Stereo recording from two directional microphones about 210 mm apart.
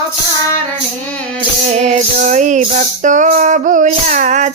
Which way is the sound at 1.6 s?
35° right (ahead or behind).